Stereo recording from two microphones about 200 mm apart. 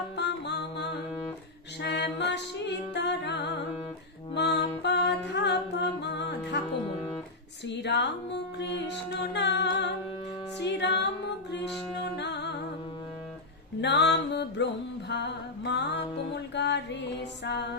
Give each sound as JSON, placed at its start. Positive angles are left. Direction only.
{"t": 0.2, "sound": "music", "side_deg": 60}
{"t": 7.7, "sound": "music", "side_deg": 60}
{"t": 12.1, "sound": "music", "side_deg": 60}
{"t": 13.8, "sound": "music", "side_deg": 60}